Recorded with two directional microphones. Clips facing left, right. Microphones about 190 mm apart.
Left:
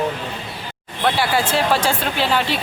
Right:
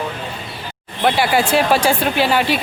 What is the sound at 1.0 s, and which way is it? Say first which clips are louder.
Speech: right 3 dB; 15° right (ahead or behind).